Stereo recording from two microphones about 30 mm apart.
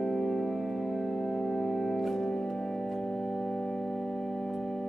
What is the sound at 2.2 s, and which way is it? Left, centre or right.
Organ, centre.